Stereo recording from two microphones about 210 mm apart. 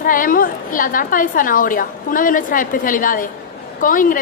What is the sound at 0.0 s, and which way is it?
A woman's voice, 40° left (ahead or behind).